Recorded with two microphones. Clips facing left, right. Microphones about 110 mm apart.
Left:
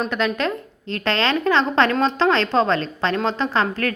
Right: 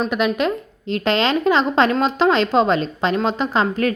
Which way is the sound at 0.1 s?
10° right (ahead or behind).